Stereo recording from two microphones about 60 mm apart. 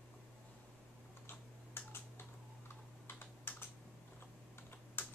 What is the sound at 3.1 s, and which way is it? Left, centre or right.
Typing, left.